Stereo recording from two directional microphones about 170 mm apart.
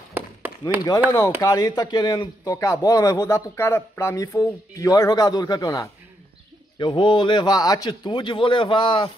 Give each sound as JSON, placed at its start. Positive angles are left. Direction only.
{"t": 0.1, "sound": "chop", "side_deg": -10}
{"t": 1.4, "sound": "speech", "side_deg": 20}